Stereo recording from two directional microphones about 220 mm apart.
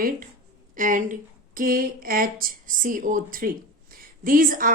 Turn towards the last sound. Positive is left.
turn(degrees=-40)  # may be behind; listen again after turning